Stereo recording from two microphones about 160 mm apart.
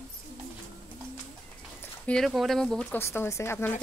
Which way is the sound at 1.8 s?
5° left (ahead or behind).